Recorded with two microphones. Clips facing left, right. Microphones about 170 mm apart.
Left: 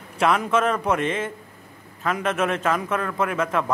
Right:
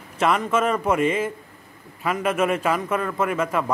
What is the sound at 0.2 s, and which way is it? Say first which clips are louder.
A man's voice: even; centre (ahead or behind).